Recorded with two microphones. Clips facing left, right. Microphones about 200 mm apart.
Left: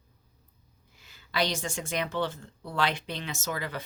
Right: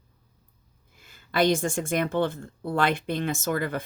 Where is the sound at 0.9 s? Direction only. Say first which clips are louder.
Right 5 dB; 50° right (ahead or behind).